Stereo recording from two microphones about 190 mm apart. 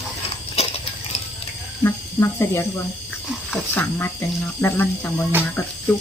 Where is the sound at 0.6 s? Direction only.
35° left (ahead or behind).